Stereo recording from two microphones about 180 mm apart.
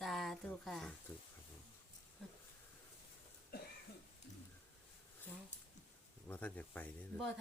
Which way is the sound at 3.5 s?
60° left (ahead or behind).